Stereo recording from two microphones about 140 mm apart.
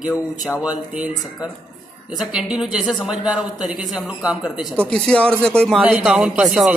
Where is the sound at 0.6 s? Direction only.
10° right (ahead or behind).